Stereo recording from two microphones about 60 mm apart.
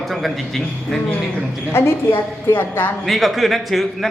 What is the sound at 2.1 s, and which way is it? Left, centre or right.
Speech, left.